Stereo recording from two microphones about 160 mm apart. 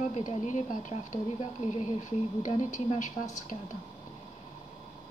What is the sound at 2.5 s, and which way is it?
Speech, 50° left (ahead or behind).